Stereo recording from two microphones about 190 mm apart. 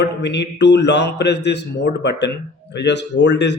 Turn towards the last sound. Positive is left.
turn(degrees=65)  # may be behind; listen again after turning